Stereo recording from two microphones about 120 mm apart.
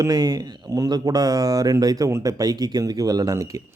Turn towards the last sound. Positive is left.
turn(degrees=-30)  # may be behind; listen again after turning